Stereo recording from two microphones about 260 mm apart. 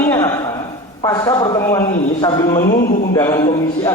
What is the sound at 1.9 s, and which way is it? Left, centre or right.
Speech, left.